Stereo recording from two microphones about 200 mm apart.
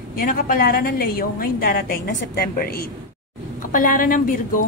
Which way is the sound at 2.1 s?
65° left (ahead or behind).